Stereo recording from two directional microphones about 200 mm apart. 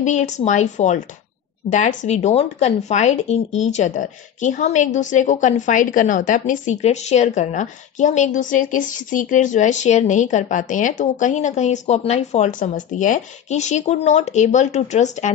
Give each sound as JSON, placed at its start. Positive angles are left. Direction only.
{"t": 0.0, "sound": "speech", "side_deg": 35}